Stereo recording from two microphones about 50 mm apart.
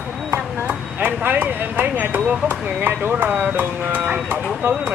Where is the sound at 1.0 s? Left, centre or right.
Right.